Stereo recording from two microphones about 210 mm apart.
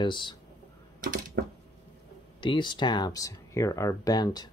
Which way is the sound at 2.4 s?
20° left (ahead or behind).